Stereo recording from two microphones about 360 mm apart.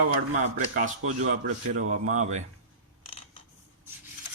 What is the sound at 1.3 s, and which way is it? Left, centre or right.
A man's voice, right.